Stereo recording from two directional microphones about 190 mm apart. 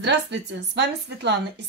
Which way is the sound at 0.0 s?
65° right (ahead or behind).